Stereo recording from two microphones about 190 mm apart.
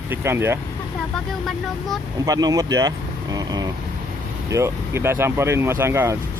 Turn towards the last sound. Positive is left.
turn(degrees=-15)  # may be behind; listen again after turning